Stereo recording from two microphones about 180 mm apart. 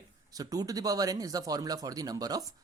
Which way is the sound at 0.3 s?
20° right (ahead or behind).